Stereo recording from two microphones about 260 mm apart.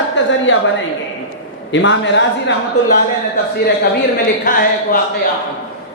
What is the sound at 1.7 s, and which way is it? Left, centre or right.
Speech, left.